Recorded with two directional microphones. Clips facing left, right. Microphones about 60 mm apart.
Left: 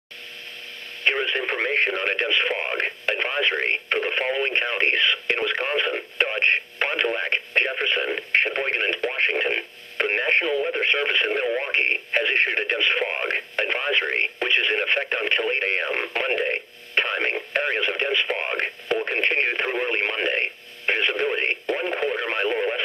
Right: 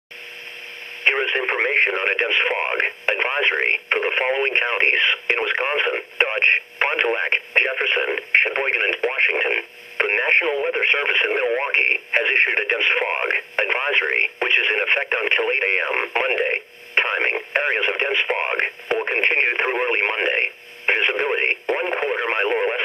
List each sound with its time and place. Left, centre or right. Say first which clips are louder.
1.0 s speech: right 3 dB; right